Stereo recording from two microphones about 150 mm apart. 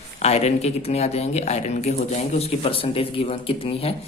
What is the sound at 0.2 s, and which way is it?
A man's voice, 45° left (ahead or behind).